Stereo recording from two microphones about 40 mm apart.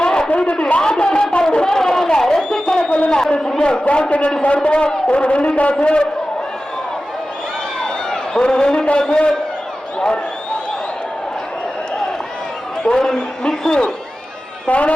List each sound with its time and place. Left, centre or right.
0.0 s a sound: left
0.3 s a man's voice: left
0.5 s a sound: left
3.1 s a man's voice: left
5.7 s a man's voice: left
7.8 s a man's voice: centre
12.8 s a man's voice: centre
14.7 s speech: left